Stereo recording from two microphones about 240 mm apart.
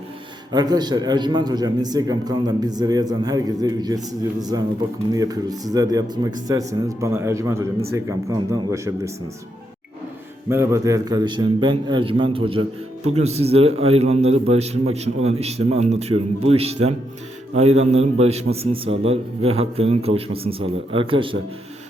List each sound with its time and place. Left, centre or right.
0.5 s a man's voice: centre
10.5 s a man's voice: centre